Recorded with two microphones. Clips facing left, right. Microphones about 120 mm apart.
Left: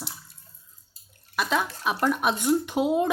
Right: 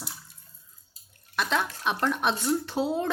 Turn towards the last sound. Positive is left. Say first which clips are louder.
# left 4 dB
turn(degrees=15)  # may be behind; listen again after turning